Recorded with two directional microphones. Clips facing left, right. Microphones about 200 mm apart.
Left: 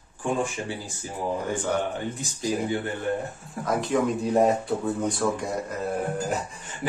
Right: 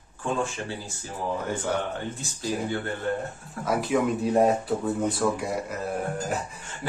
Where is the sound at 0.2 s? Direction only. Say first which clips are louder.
Left 1 dB; 15° left (ahead or behind).